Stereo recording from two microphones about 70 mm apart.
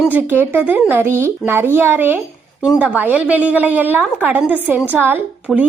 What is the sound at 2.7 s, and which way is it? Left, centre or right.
A child's voice, centre.